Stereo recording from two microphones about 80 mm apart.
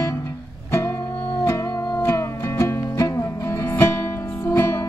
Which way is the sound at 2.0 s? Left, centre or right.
Left.